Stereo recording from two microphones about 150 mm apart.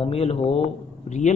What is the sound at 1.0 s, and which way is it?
Speech, 50° left (ahead or behind).